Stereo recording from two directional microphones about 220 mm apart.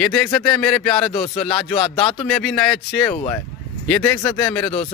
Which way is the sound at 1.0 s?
25° left (ahead or behind).